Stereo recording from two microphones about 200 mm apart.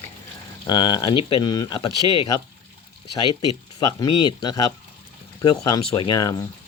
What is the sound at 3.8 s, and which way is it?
Speech, 20° left (ahead or behind).